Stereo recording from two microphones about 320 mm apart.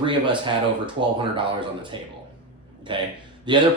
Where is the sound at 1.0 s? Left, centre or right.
Right.